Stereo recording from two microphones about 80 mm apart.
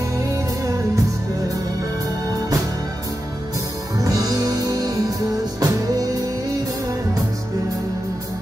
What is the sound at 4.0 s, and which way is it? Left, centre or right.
Music, right.